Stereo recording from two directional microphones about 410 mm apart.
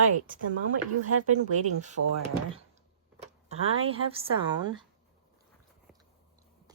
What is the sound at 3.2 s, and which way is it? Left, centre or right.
Speech, centre.